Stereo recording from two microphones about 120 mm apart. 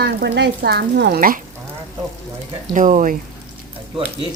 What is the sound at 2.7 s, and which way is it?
Speech, 90° right.